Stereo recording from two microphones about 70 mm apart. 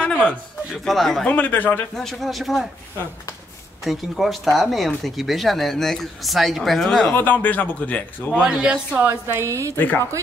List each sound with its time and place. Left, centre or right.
0.0 s a sound: centre
0.8 s speech: centre
1.2 s speech: left
2.0 s speech: centre
3.8 s speech: centre
7.2 s speech: left
8.4 s speech: centre
9.0 s speech: right
9.8 s speech: left